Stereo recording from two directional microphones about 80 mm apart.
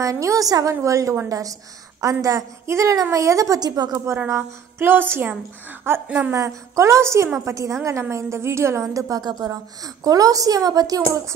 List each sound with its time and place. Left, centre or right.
0.0 s a woman's voice: right
4.3 s a sound: right
6.0 s a woman's voice: centre
6.3 s a woman's voice: right
9.2 s a woman's voice: right